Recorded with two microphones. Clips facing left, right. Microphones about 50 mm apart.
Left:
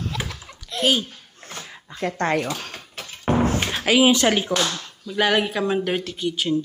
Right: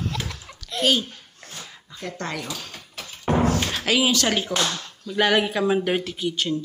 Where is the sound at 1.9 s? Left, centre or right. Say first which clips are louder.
Left 8 dB; left.